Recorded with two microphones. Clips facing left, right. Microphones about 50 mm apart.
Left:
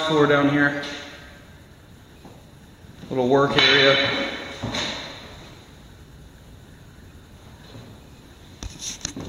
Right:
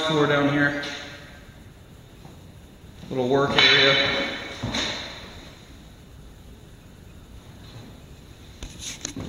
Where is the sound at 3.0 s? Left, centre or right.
Centre.